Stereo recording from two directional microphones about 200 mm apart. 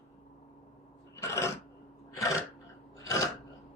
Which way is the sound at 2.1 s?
15° left (ahead or behind).